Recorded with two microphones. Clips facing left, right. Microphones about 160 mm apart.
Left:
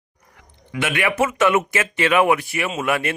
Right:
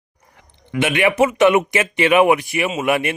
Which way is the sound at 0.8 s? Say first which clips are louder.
Right 5 dB; 20° right (ahead or behind).